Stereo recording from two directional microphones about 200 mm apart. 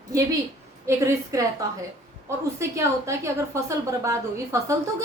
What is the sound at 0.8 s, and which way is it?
A woman's voice, 15° right (ahead or behind).